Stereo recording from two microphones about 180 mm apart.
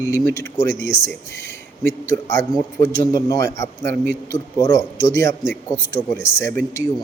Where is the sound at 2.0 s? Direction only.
15° left (ahead or behind).